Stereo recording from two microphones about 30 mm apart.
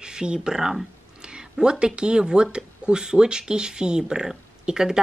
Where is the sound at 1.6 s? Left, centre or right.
Right.